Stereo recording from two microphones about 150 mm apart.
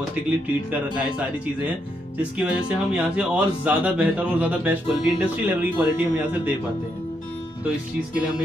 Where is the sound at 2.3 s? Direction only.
10° right (ahead or behind).